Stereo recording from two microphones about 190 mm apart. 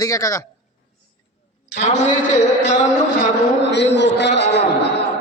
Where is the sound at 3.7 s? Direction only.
65° left (ahead or behind).